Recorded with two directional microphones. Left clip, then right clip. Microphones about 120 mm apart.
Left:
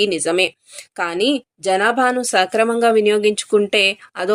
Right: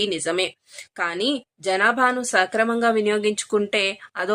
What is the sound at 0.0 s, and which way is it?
A woman's voice, 35° left (ahead or behind).